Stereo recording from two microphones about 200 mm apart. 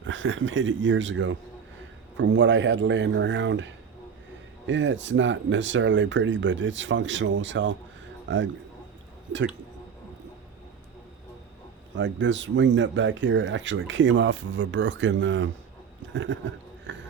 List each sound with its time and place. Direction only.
0.0 s a man's voice: 70° right (ahead or behind)
11.9 s a man's voice: 65° right (ahead or behind)
16.9 s music: 65° right (ahead or behind)